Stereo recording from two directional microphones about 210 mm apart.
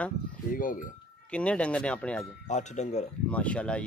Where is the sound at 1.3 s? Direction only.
5° left (ahead or behind).